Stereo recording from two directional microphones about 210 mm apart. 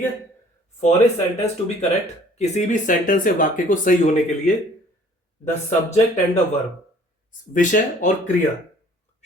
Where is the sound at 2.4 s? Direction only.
35° left (ahead or behind).